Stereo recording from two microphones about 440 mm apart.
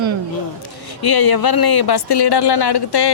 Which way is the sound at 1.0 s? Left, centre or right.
Left.